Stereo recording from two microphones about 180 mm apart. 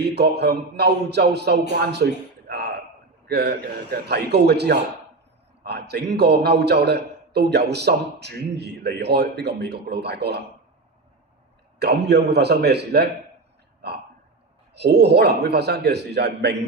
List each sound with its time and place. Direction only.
0.0 s a man's voice: 70° right (ahead or behind)
11.8 s a man's voice: 65° right (ahead or behind)
14.7 s a man's voice: 65° right (ahead or behind)